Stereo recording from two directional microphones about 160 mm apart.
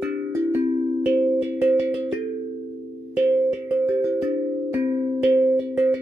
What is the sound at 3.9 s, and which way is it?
Cowbell, 15° right (ahead or behind).